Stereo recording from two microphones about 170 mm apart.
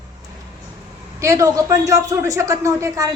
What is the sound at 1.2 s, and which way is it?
Speech, 20° right (ahead or behind).